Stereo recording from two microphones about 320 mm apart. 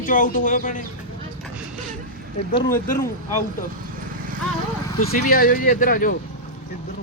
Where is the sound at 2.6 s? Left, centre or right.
Left.